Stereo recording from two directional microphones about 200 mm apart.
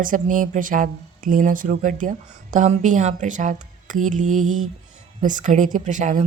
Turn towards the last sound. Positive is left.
turn(degrees=-40)  # may be behind; listen again after turning